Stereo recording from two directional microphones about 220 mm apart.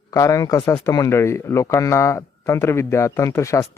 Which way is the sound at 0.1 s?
15° left (ahead or behind).